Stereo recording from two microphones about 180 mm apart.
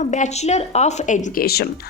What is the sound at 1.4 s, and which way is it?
Speech, 60° left (ahead or behind).